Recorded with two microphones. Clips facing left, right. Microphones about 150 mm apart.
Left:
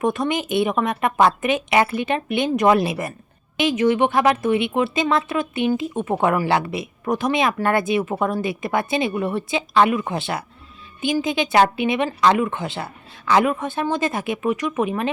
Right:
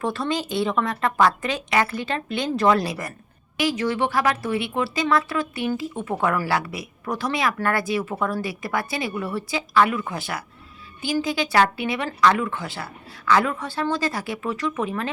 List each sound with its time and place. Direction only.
0.0 s a woman's voice: 20° left (ahead or behind)